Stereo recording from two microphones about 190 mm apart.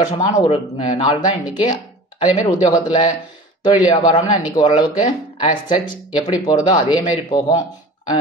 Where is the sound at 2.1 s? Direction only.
35° left (ahead or behind).